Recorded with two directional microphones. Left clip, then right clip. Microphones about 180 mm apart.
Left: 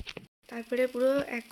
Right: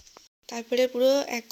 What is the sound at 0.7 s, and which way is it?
Speech, 25° right (ahead or behind).